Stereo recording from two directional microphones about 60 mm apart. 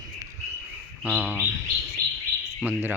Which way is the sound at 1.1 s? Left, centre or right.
Right.